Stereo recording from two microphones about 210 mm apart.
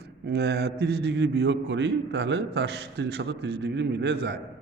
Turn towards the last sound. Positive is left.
turn(degrees=-50)  # may be behind; listen again after turning